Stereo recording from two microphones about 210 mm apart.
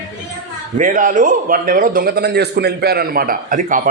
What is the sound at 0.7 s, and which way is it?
A man's voice, 40° right (ahead or behind).